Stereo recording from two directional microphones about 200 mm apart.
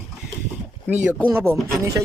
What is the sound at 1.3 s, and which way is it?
Speech, 10° right (ahead or behind).